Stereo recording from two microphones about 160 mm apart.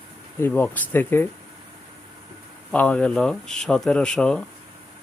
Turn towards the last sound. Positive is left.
turn(degrees=5)  # may be behind; listen again after turning